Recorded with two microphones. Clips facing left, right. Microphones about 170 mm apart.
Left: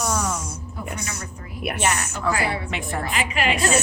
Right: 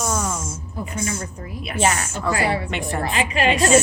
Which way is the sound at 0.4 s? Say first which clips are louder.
Right 2 dB; 65° left (ahead or behind).